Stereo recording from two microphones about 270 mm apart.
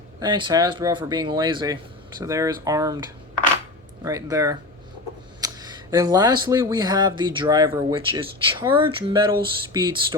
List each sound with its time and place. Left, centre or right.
0.2 s speech: centre